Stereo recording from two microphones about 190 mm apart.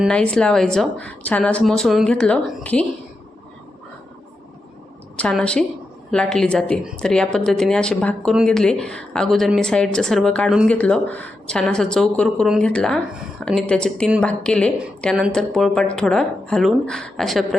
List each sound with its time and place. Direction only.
0.0 s speech: 5° left (ahead or behind)
5.1 s speech: 5° left (ahead or behind)